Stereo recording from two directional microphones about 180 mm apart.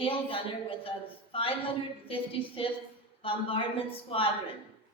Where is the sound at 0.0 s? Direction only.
30° left (ahead or behind).